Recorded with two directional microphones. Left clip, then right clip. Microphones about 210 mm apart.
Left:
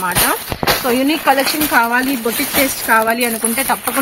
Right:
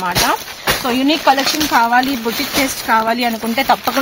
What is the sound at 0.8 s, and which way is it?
Speech, 55° right (ahead or behind).